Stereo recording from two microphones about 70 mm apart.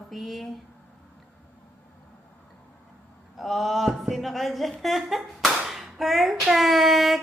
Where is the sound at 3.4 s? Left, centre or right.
Centre.